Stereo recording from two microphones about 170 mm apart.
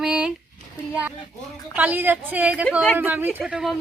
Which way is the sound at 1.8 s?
10° right (ahead or behind).